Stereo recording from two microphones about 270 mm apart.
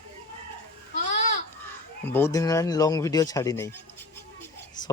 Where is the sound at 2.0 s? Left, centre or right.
Centre.